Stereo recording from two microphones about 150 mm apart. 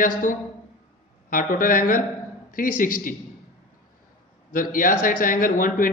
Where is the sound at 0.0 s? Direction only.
65° left (ahead or behind).